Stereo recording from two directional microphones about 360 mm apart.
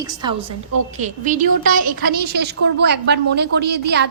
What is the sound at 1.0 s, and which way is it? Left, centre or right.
A woman's voice, right.